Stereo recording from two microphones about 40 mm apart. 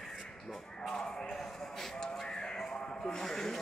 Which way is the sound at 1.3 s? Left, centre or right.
Centre.